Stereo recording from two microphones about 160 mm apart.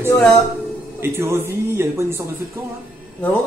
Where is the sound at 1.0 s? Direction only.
15° right (ahead or behind).